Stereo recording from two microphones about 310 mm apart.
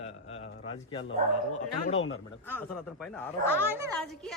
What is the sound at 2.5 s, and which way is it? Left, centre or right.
Speech, centre.